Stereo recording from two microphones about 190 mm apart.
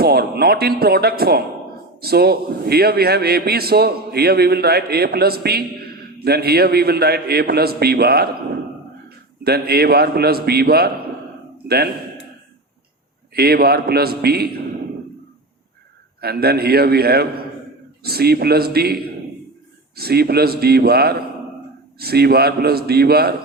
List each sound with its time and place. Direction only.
0.0 s a man's voice: 55° right (ahead or behind)
13.3 s speech: 55° right (ahead or behind)
16.2 s speech: 55° right (ahead or behind)
20.0 s speech: 55° right (ahead or behind)